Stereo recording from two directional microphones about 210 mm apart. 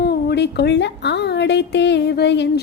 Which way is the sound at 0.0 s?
50° left (ahead or behind).